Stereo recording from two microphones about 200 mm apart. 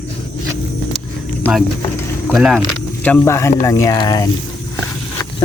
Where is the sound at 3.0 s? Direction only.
10° left (ahead or behind).